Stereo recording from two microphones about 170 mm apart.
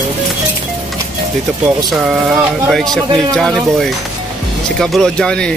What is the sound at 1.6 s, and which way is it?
Speech, 5° right (ahead or behind).